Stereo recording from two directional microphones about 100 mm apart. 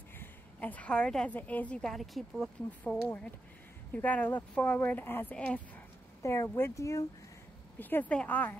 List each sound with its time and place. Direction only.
0.2 s a woman's voice: 15° left (ahead or behind); by 2.5 s centre (ahead or behind)
2.8 s speech: 15° left (ahead or behind)
6.2 s speech: 25° left (ahead or behind)
7.8 s speech: 15° left (ahead or behind)